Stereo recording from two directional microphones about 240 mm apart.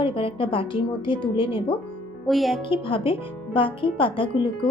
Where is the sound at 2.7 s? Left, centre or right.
Left.